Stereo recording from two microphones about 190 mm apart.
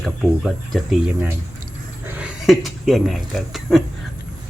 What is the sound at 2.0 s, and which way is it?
Speech, 5° right (ahead or behind).